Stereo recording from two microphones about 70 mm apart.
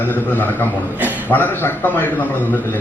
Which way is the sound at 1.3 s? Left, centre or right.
Left.